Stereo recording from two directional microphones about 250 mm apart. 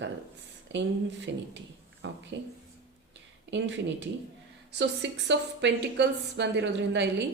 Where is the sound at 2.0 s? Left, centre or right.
Right.